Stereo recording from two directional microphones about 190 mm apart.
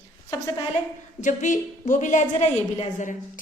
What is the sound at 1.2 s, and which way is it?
A woman's voice, 40° left (ahead or behind).